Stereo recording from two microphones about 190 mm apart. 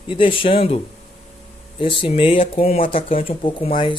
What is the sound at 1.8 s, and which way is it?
Speech, 30° left (ahead or behind).